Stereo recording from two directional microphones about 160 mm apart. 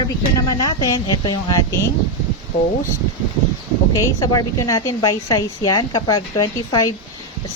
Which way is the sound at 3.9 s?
25° left (ahead or behind).